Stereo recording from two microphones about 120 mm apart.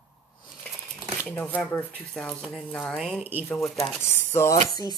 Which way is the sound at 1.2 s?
15° left (ahead or behind).